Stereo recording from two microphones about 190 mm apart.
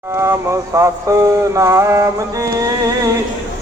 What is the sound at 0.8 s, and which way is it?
Mantra, 15° right (ahead or behind).